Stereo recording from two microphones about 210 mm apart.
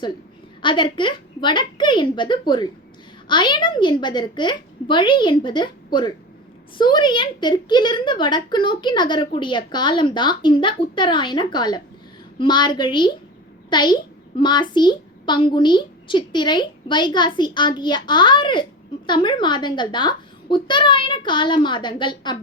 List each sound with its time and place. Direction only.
0.6 s speech: 25° left (ahead or behind)